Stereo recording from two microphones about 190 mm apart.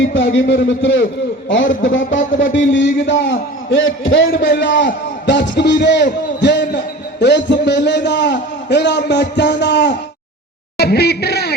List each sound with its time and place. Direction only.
0.0 s a man's voice: 75° left (ahead or behind)
4.4 s a man's voice: 55° left (ahead or behind)